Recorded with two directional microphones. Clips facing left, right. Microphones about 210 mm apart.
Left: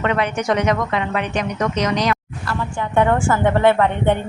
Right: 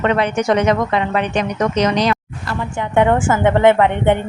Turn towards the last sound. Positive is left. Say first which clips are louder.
# right 3 dB
turn(degrees=-15)  # may be behind; listen again after turning